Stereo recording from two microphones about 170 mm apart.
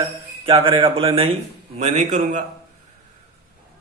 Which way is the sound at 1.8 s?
45° right (ahead or behind).